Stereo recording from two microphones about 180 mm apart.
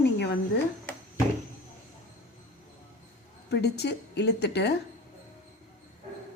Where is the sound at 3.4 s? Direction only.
70° left (ahead or behind).